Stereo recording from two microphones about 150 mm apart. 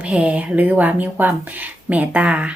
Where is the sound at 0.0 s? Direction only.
10° right (ahead or behind).